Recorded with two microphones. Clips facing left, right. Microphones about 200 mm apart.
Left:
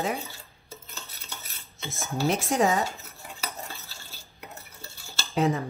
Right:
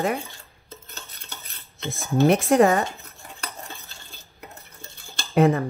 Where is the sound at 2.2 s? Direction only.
55° right (ahead or behind).